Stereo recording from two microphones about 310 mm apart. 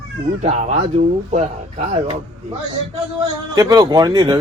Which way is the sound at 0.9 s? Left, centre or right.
Right.